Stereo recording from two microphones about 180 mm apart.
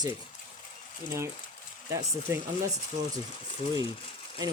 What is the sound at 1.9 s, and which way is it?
Speech, 20° right (ahead or behind).